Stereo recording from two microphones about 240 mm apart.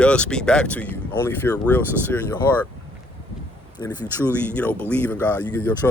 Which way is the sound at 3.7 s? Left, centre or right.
Centre.